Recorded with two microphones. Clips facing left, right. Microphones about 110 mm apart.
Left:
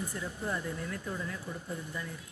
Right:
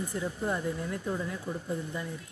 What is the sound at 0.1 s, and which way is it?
Speech, 25° right (ahead or behind).